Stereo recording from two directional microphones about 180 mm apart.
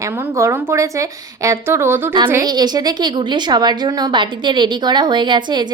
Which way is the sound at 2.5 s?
20° right (ahead or behind).